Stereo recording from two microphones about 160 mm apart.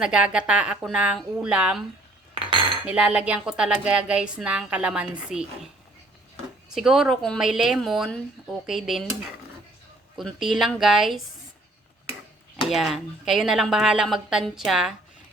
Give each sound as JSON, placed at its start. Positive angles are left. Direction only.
{"t": 0.0, "sound": "speech", "side_deg": -5}
{"t": 2.3, "sound": "cutlery", "side_deg": -35}
{"t": 2.8, "sound": "speech", "side_deg": -5}
{"t": 6.7, "sound": "speech", "side_deg": 0}
{"t": 12.6, "sound": "speech", "side_deg": 0}